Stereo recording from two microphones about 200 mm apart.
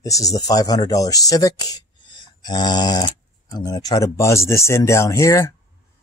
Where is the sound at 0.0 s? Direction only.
15° left (ahead or behind).